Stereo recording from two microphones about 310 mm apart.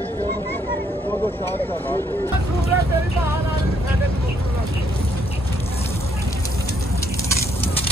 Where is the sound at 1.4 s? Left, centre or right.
Centre.